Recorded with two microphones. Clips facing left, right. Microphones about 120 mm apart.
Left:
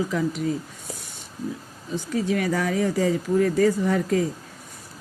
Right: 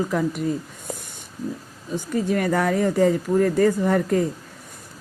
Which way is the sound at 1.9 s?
50° right (ahead or behind).